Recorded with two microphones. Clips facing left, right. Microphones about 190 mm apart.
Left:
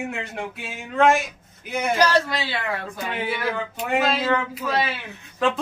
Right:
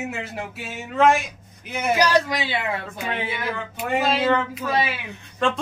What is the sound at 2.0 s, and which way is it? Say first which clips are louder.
Speech: even; 15° right (ahead or behind).